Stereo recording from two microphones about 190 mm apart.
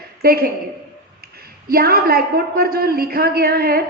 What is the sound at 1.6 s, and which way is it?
A woman's voice, 55° right (ahead or behind).